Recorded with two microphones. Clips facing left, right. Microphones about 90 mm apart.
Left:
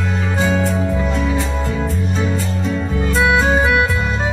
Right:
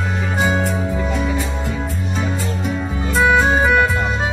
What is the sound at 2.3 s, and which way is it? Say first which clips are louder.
Music: left 2 dB; 10° right (ahead or behind).